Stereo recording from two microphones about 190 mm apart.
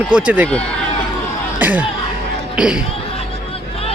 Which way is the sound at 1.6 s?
10° right (ahead or behind).